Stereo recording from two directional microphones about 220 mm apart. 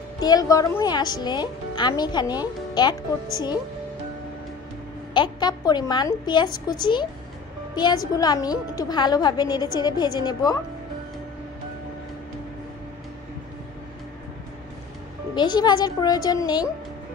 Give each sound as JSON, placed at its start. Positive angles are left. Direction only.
{"t": 0.2, "sound": "a woman's voice", "side_deg": 15}
{"t": 5.1, "sound": "a woman's voice", "side_deg": 20}
{"t": 15.3, "sound": "a woman's voice", "side_deg": 20}